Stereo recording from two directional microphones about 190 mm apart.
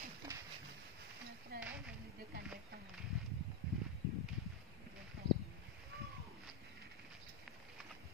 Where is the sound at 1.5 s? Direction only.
55° right (ahead or behind).